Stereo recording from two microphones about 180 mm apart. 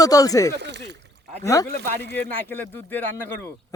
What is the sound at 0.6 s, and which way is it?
Speech, 75° right (ahead or behind).